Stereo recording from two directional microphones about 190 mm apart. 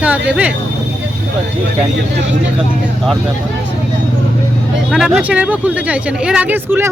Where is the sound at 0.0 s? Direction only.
5° right (ahead or behind).